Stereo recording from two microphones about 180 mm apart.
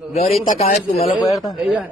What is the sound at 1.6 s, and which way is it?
Speech, centre (ahead or behind).